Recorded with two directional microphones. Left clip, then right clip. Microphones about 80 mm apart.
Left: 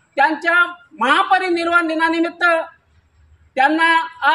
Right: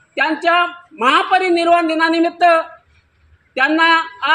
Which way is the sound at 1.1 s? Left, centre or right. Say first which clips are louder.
Right 2 dB; left.